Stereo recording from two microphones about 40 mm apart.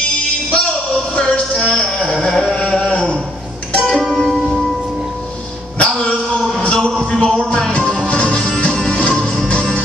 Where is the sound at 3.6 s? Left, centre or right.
Left.